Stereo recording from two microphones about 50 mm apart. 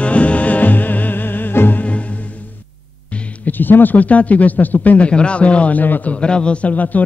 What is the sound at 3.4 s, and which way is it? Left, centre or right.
Speech, left.